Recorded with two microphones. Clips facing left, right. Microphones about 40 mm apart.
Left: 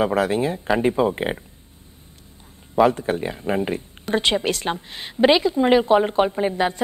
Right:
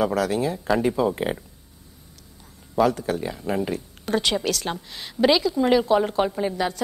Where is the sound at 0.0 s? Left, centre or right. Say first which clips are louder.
Left 2 dB; left.